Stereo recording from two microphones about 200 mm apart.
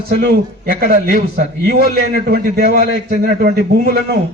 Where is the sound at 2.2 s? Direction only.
50° right (ahead or behind).